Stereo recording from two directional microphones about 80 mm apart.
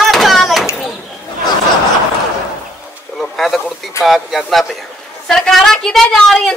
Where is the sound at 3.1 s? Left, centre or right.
Centre.